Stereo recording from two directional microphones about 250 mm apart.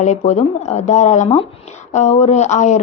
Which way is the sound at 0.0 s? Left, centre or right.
Left.